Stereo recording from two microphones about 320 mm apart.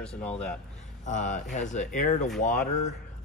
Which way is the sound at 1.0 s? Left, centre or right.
Left.